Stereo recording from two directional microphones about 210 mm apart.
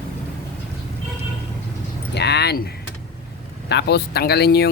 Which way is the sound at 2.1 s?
55° left (ahead or behind).